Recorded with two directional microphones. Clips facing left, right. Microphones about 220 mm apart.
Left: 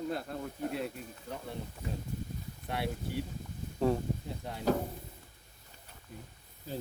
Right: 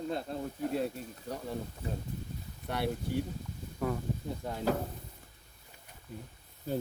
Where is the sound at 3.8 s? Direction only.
25° left (ahead or behind).